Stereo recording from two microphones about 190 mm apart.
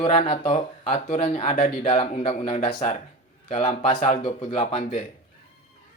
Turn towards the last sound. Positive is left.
turn(degrees=30)  # may be behind; listen again after turning